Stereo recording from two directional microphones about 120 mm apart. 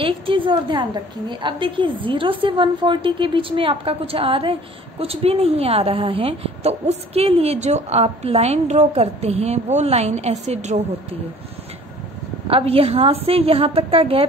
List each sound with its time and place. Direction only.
0.0 s a woman's voice: 45° right (ahead or behind); by 10.8 s 70° right (ahead or behind)
12.4 s a woman's voice: 50° right (ahead or behind)